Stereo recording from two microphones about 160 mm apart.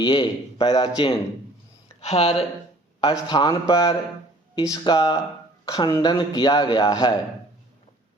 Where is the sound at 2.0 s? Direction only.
40° left (ahead or behind).